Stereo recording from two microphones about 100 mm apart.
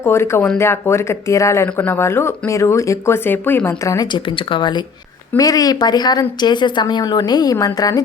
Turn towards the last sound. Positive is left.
turn(degrees=40)  # may be behind; listen again after turning